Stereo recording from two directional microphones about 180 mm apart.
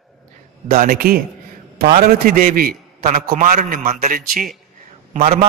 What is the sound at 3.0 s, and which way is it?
A man's voice, 40° right (ahead or behind).